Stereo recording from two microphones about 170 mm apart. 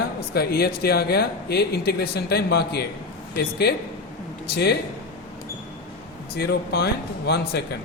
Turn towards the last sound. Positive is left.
turn(degrees=75)  # may be behind; listen again after turning